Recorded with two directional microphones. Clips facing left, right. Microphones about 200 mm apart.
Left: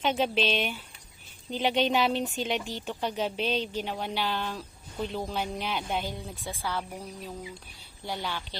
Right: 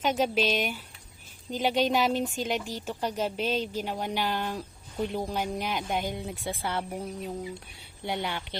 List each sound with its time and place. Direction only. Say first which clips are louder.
0.0 s a woman's voice: right 1 dB; 5° right (ahead or behind)
6.4 s a woman's voice: right 1 dB; 25° right (ahead or behind)